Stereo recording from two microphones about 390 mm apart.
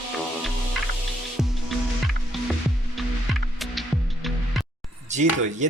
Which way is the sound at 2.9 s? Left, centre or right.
Centre.